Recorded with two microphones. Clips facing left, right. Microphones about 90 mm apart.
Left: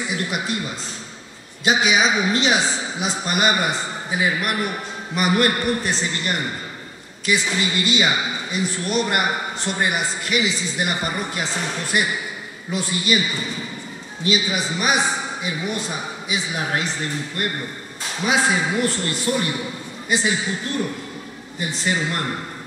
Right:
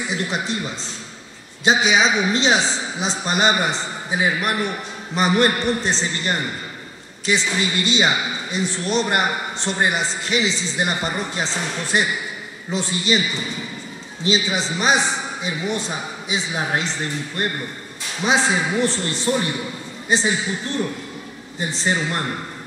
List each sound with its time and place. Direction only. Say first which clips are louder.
0.1 s a woman's voice: right 2 dB; 25° right (ahead or behind)
1.6 s a woman's voice: right 1 dB; 25° right (ahead or behind)
14.2 s a woman's voice: right 1 dB; 25° right (ahead or behind)
21.5 s a woman's voice: right 1 dB; 30° right (ahead or behind)